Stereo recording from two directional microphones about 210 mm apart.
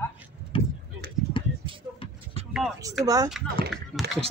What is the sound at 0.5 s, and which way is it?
Vehicle, 25° left (ahead or behind).